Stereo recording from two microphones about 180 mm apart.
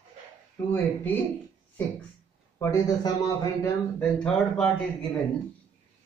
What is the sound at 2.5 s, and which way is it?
Speech, 20° left (ahead or behind).